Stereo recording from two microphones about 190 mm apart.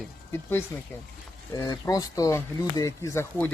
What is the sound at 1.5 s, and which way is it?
Speech, 20° left (ahead or behind).